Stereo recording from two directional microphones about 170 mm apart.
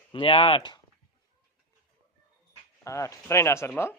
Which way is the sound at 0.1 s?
30° left (ahead or behind).